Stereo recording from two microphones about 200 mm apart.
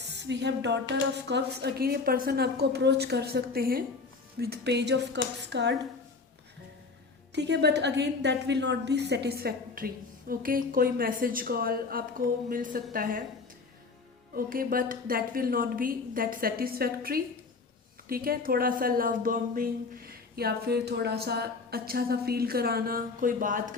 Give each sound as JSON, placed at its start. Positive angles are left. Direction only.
{"t": 0.1, "sound": "speech", "side_deg": -60}
{"t": 7.3, "sound": "a woman's voice", "side_deg": -60}
{"t": 14.3, "sound": "a woman's voice", "side_deg": -45}